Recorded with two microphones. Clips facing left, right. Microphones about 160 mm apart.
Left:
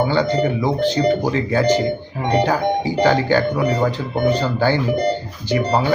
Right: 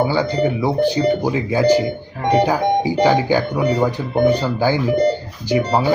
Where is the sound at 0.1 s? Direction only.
10° right (ahead or behind).